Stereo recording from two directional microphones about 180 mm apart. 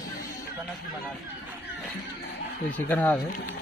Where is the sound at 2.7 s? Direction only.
10° left (ahead or behind).